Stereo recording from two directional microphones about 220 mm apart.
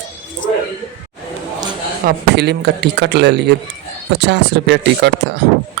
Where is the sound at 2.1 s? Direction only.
50° right (ahead or behind).